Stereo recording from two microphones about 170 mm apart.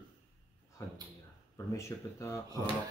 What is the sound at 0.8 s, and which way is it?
Speech, 15° left (ahead or behind).